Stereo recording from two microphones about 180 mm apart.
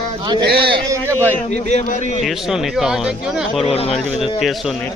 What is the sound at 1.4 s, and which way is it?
Speech, 40° left (ahead or behind).